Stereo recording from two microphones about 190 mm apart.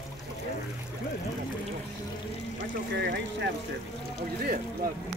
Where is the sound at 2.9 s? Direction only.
60° right (ahead or behind).